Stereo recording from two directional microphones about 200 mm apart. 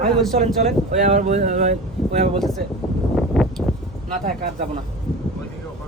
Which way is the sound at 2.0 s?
Centre (ahead or behind).